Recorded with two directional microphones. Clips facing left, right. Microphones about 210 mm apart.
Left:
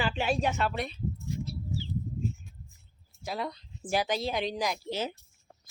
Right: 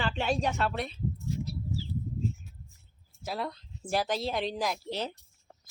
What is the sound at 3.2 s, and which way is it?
Speech, centre (ahead or behind).